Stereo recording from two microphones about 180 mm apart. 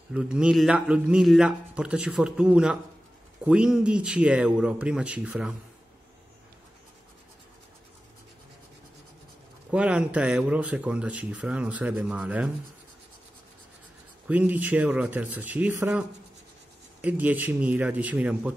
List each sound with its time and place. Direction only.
0.1 s speech: 5° right (ahead or behind)
9.7 s speech: 5° right (ahead or behind)
14.2 s speech: 10° right (ahead or behind)